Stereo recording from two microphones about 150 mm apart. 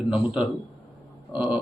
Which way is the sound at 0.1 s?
5° right (ahead or behind).